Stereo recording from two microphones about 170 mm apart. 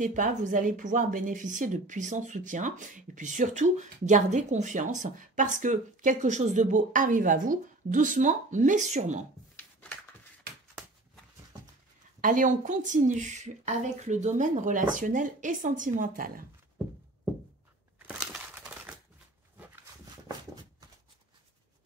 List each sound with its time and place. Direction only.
0.0 s speech: 45° right (ahead or behind)
9.6 s a sound: 10° left (ahead or behind)
12.2 s speech: 50° right (ahead or behind)
17.9 s crushing: 5° right (ahead or behind)